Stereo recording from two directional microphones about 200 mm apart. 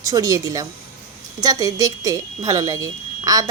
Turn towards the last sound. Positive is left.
turn(degrees=-15)  # may be behind; listen again after turning